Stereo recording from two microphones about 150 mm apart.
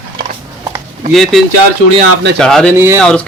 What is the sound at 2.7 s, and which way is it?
Speech, 15° right (ahead or behind).